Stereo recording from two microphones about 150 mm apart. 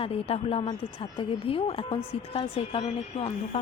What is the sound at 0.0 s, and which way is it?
A woman's voice, 40° left (ahead or behind).